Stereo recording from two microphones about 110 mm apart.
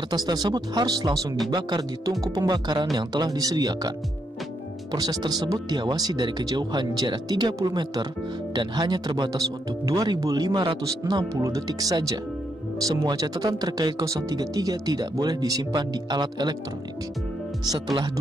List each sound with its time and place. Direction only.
0.1 s speech: 35° right (ahead or behind)
4.9 s speech: 35° right (ahead or behind)